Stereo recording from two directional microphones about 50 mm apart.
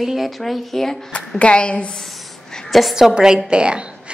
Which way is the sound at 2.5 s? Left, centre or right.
Centre.